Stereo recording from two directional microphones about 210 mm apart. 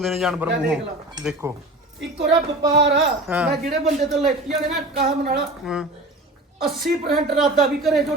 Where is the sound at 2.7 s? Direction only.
60° right (ahead or behind).